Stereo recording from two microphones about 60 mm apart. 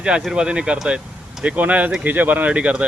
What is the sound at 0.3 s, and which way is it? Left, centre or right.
Speech, centre.